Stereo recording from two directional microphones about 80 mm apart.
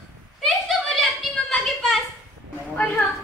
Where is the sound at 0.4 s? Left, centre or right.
Centre.